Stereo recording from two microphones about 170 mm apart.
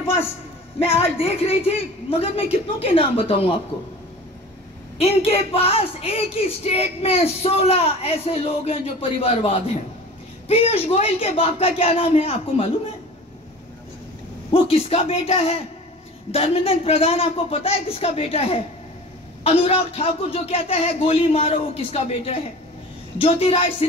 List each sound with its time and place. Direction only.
0.8 s a woman's voice: 35° left (ahead or behind)
4.9 s a woman's voice: 35° left (ahead or behind)
14.5 s a woman's voice: 35° left (ahead or behind)